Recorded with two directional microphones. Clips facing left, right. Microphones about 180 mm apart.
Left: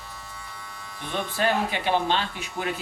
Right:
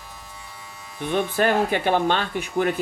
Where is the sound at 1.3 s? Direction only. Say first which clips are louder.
Right 3 dB; 50° right (ahead or behind).